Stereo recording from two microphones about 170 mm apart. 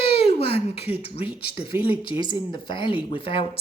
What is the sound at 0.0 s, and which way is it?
Speech, 35° left (ahead or behind).